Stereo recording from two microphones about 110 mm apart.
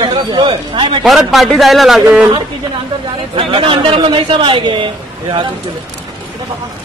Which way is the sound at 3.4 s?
55° right (ahead or behind).